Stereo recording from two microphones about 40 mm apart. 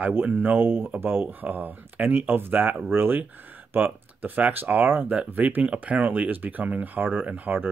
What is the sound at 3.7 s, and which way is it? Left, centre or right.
Speech, right.